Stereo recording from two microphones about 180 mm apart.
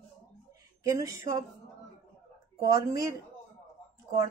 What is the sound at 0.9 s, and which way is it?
Speech, 20° right (ahead or behind).